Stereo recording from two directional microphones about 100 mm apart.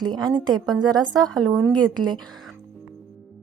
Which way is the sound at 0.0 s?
45° right (ahead or behind).